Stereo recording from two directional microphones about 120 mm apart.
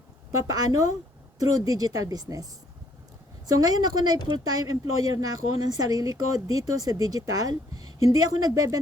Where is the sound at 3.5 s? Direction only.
35° right (ahead or behind).